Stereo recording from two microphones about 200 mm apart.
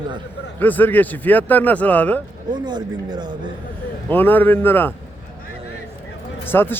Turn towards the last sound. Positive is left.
turn(degrees=10)  # may be behind; listen again after turning